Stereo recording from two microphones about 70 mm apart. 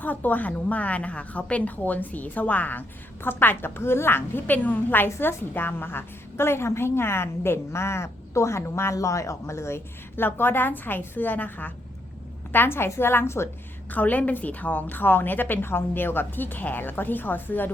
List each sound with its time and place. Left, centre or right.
0.0 s a woman's voice: left
13.9 s a woman's voice: left